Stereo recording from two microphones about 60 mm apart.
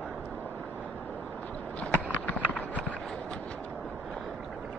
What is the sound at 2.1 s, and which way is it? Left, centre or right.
Clip-clop, left.